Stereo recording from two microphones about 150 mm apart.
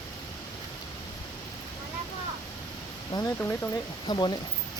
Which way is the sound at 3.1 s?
25° left (ahead or behind).